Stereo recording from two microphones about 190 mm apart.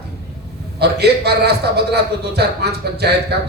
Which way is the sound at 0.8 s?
60° right (ahead or behind).